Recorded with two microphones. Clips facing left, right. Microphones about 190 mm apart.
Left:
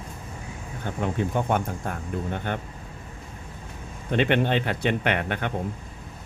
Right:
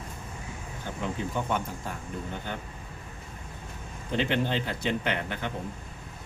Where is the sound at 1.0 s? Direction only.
55° left (ahead or behind).